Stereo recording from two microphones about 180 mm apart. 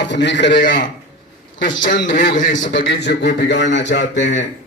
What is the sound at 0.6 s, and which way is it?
Speech, 50° left (ahead or behind).